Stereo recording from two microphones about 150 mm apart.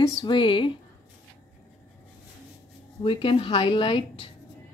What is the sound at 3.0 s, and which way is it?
Speech, 35° left (ahead or behind).